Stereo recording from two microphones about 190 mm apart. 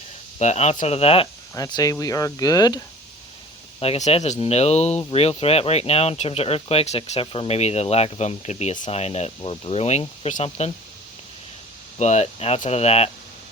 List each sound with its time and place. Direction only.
0.3 s speech: 35° left (ahead or behind)
1.5 s speech: 20° left (ahead or behind)
3.8 s speech: 35° left (ahead or behind)
11.9 s speech: 35° left (ahead or behind)